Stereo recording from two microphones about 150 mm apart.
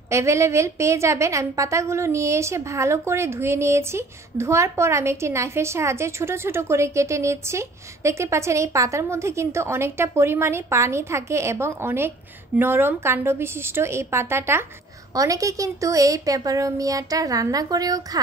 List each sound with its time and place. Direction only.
0.1 s a woman's voice: 20° right (ahead or behind)